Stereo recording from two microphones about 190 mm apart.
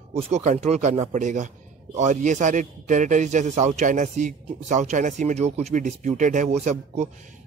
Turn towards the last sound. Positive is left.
turn(degrees=-35)  # may be behind; listen again after turning